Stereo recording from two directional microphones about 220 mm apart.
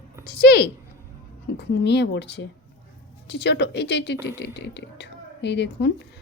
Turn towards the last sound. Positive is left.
turn(degrees=50)  # may be behind; listen again after turning